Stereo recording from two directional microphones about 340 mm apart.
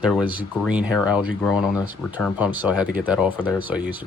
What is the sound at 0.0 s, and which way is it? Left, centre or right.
Speech, centre.